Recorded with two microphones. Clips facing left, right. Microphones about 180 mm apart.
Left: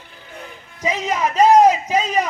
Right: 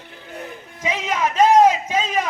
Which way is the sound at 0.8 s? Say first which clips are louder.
Left 2 dB; 35° left (ahead or behind).